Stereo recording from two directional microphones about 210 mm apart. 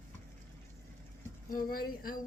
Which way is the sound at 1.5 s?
45° left (ahead or behind).